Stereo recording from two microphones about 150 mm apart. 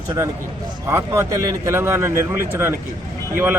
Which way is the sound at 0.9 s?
20° right (ahead or behind).